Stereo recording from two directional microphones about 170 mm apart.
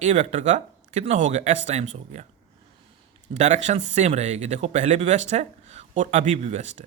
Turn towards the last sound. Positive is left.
turn(degrees=-45)  # may be behind; listen again after turning